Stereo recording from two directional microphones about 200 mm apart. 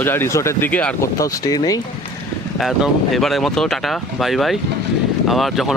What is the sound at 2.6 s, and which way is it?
Speech, centre (ahead or behind).